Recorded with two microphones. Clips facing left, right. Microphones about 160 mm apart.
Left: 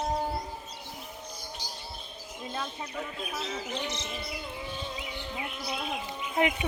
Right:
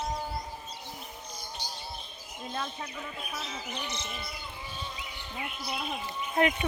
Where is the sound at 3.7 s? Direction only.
90° left.